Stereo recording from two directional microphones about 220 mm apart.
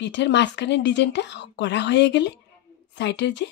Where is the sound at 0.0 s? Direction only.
50° left (ahead or behind).